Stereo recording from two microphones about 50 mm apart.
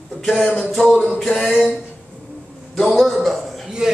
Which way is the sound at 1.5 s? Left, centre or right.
Centre.